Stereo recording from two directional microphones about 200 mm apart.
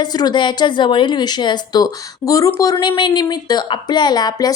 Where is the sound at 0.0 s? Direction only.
20° left (ahead or behind).